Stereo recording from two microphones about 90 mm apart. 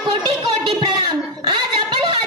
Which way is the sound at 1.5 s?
65° right (ahead or behind).